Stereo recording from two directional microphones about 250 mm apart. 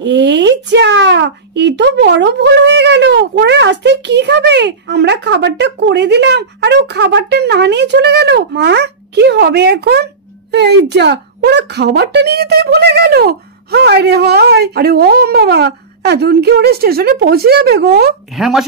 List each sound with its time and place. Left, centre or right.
0.0 s speech: right
18.3 s speech: centre